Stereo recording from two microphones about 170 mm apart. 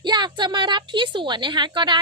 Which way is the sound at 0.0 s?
25° right (ahead or behind).